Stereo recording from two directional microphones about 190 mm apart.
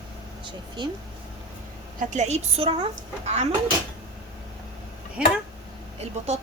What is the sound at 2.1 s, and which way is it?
A woman's voice, 35° right (ahead or behind).